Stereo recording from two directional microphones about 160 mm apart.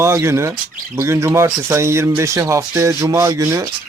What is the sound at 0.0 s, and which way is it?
Speech, 15° right (ahead or behind).